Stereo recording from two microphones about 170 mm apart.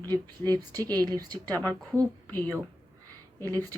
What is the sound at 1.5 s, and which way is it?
Speech, 10° left (ahead or behind).